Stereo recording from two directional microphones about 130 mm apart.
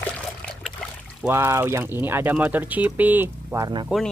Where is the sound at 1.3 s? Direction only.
20° right (ahead or behind).